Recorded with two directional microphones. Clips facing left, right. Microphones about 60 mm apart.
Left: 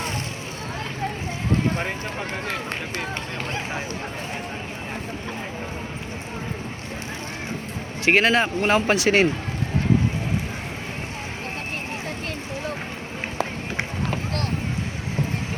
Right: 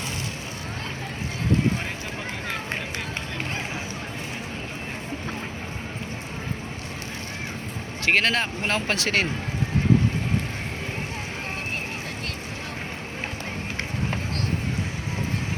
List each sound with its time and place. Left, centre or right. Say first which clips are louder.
8.0 s speech: left 4 dB; centre